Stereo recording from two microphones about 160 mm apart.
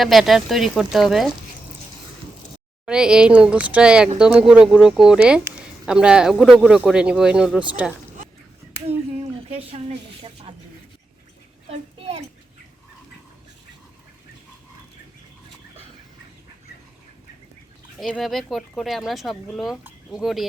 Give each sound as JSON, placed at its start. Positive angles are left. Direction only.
{"t": 0.0, "sound": "speech", "side_deg": 0}
{"t": 2.8, "sound": "speech", "side_deg": -5}
{"t": 9.5, "sound": "a woman's voice", "side_deg": -40}
{"t": 11.7, "sound": "a sound", "side_deg": -40}
{"t": 17.9, "sound": "speech", "side_deg": 0}